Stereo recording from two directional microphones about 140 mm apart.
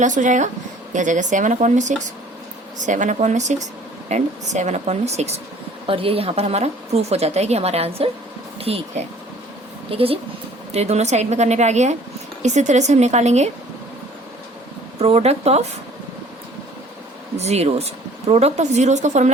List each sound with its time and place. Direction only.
0.0 s a woman's voice: 60° right (ahead or behind)
14.9 s a woman's voice: 45° right (ahead or behind)
17.3 s a woman's voice: 50° right (ahead or behind)